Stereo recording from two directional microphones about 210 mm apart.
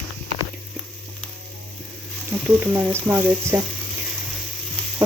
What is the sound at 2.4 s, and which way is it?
Speech, 10° right (ahead or behind).